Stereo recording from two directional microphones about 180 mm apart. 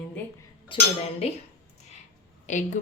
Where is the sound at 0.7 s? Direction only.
30° left (ahead or behind).